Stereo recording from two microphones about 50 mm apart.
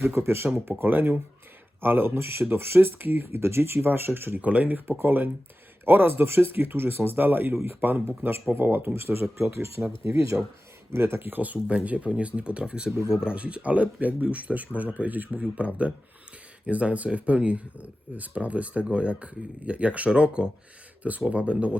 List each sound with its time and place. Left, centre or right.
0.0 s speech: right
0.8 s speech: right
4.4 s speech: right
4.9 s speech: right
7.5 s speech: right
7.8 s speech: right
9.5 s speech: right
10.3 s speech: right
10.9 s speech: right; by 13.3 s centre
13.3 s speech: right